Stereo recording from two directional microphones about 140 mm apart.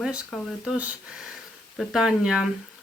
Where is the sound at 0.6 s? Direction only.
10° right (ahead or behind).